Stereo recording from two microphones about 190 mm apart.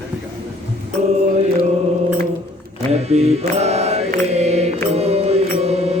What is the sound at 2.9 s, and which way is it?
Mantra, 35° right (ahead or behind).